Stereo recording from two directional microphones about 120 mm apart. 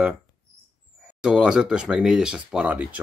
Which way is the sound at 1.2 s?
5° right (ahead or behind).